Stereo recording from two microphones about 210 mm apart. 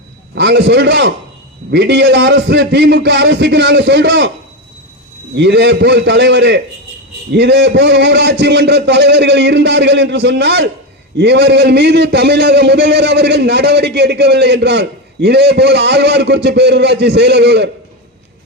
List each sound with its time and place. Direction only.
0.3 s a man's voice: 55° right (ahead or behind)
5.3 s a man's voice: 55° right (ahead or behind)